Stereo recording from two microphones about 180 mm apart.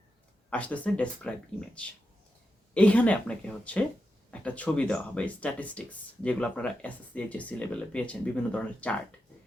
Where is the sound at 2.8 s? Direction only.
5° left (ahead or behind).